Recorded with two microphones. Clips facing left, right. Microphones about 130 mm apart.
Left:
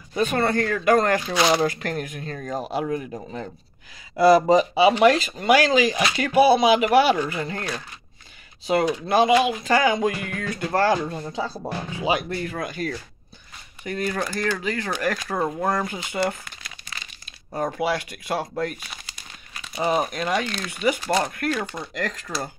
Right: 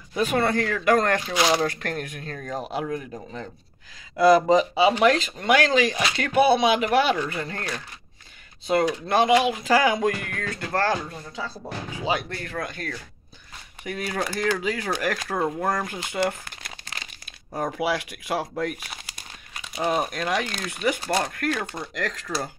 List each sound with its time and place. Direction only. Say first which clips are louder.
0.1 s speech: left 1 dB; 5° right (ahead or behind); by 11.0 s 15° left (ahead or behind)
11.3 s speech: left 3 dB; 30° left (ahead or behind)
12.0 s speech: left 3 dB; 10° left (ahead or behind)
13.8 s speech: left 2 dB; 5° right (ahead or behind)
17.6 s speech: left 1 dB; 5° right (ahead or behind)
19.8 s speech: left 2 dB; 5° left (ahead or behind)